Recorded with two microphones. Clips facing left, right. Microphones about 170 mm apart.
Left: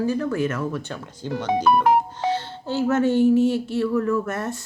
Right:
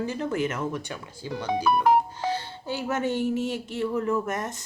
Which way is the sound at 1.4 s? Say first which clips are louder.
Left 3 dB; 60° left (ahead or behind).